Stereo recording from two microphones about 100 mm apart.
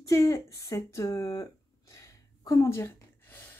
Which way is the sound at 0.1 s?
30° left (ahead or behind).